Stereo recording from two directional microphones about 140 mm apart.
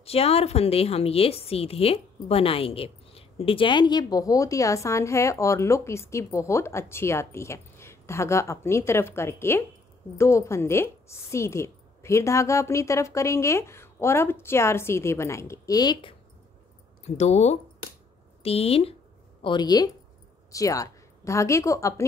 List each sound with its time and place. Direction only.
0.0 s a woman's voice: 45° left (ahead or behind)
17.0 s speech: 55° left (ahead or behind)
19.4 s a woman's voice: 30° left (ahead or behind)